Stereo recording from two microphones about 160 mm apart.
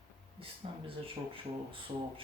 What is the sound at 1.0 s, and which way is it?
Speech, 35° right (ahead or behind).